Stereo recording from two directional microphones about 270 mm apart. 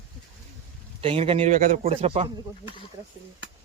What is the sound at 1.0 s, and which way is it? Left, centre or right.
A man's voice, right.